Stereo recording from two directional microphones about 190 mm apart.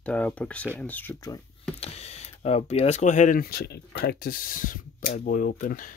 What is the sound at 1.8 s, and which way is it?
Speech, 35° left (ahead or behind).